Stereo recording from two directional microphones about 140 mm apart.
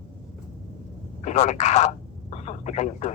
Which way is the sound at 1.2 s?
55° left (ahead or behind).